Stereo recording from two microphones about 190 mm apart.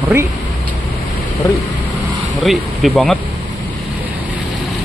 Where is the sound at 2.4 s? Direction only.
Centre (ahead or behind).